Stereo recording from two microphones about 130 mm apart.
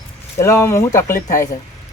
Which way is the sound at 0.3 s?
20° left (ahead or behind).